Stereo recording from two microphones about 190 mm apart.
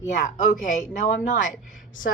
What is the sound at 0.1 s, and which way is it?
A woman's voice, 40° left (ahead or behind).